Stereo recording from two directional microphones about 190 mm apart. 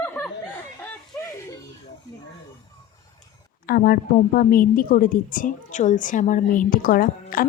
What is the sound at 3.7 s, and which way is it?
A woman's voice, 50° left (ahead or behind).